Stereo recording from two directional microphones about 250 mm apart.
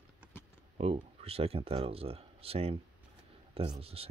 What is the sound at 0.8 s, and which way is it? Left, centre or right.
Speech, right.